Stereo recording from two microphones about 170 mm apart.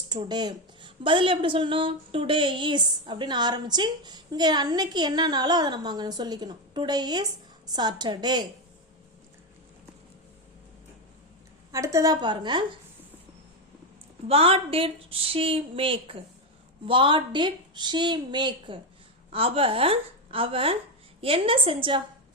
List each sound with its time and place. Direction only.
0.1 s a woman's voice: 25° right (ahead or behind)
11.7 s a woman's voice: 20° right (ahead or behind)
14.3 s a woman's voice: 35° right (ahead or behind)